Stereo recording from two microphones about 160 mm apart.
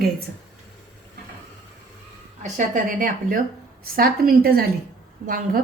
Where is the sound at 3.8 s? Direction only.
70° right (ahead or behind).